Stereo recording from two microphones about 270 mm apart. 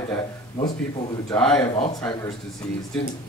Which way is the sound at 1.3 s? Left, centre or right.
Centre.